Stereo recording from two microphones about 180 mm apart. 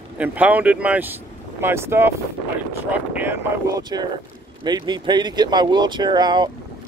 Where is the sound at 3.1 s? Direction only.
15° right (ahead or behind).